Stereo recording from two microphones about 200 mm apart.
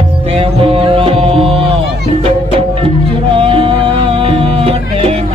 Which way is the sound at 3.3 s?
25° right (ahead or behind).